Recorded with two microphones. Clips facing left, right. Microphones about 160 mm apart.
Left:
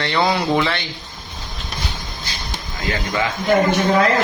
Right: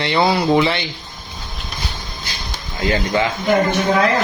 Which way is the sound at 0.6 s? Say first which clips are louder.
Right 3 dB; 15° right (ahead or behind).